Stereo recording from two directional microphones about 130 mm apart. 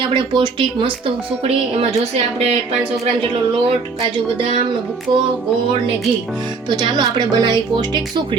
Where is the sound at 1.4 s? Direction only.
50° right (ahead or behind).